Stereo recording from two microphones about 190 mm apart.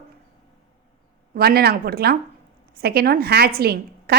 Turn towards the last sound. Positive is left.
turn(degrees=-55)  # may be behind; listen again after turning